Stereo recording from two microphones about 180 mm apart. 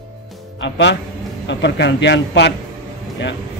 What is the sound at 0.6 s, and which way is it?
A man's voice, 75° left (ahead or behind).